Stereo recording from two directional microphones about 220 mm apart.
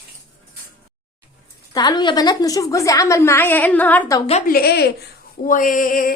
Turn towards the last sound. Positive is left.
turn(degrees=40)  # may be behind; listen again after turning